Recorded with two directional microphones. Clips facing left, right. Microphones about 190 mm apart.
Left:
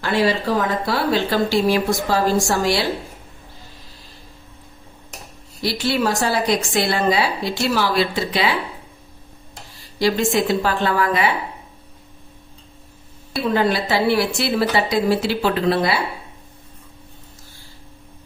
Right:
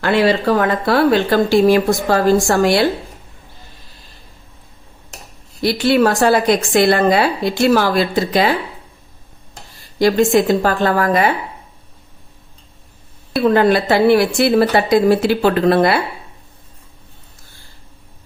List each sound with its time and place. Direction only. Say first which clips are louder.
0.0 s a woman's voice: right 5 dB; 60° right (ahead or behind)
5.6 s a woman's voice: right 7 dB; 60° right (ahead or behind)
10.0 s speech: right 6 dB; 50° right (ahead or behind)
13.4 s speech: right 6 dB; 60° right (ahead or behind)